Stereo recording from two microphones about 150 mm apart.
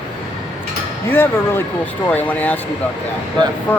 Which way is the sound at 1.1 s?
15° left (ahead or behind).